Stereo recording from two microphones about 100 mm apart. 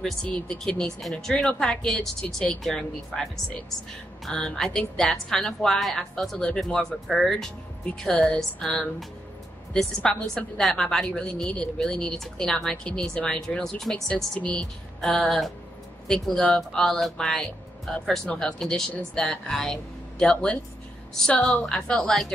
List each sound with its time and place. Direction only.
0.0 s a woman's voice: 10° left (ahead or behind)
4.3 s a woman's voice: 10° left (ahead or behind)